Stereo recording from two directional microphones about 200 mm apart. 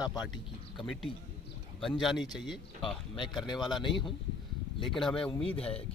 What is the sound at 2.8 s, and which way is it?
Speech, 25° left (ahead or behind).